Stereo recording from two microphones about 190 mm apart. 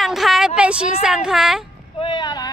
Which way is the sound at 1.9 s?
25° left (ahead or behind).